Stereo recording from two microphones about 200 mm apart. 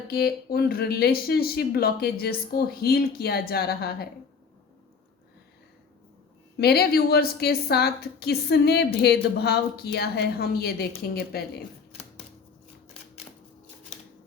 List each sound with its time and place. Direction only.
0.1 s a woman's voice: 50° left (ahead or behind)
6.6 s a woman's voice: 50° left (ahead or behind)